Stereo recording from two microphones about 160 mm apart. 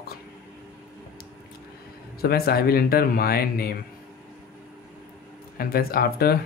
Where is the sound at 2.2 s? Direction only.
75° left (ahead or behind).